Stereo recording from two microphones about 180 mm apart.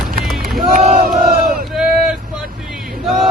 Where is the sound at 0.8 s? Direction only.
45° right (ahead or behind).